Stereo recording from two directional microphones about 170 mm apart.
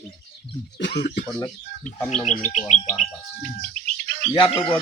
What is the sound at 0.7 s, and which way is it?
Speech, 80° left.